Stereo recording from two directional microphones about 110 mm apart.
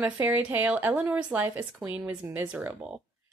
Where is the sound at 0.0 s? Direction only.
15° right (ahead or behind).